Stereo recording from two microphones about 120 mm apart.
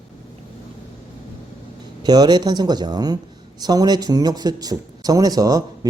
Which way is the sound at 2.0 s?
35° right (ahead or behind).